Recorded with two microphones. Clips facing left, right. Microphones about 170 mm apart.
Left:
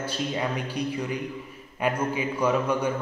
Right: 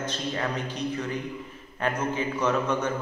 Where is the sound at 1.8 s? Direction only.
10° left (ahead or behind).